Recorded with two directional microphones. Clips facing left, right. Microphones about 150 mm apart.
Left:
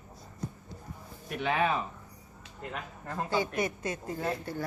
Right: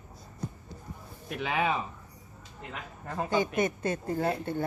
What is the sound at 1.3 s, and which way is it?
Speech, 5° right (ahead or behind).